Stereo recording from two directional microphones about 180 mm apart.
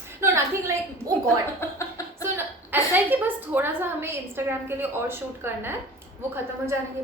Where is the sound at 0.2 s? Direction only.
15° right (ahead or behind).